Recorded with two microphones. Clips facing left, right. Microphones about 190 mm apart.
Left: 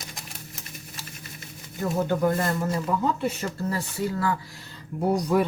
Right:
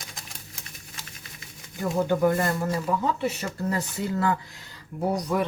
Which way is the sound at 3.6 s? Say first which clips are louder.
Right 1 dB; 20° right (ahead or behind).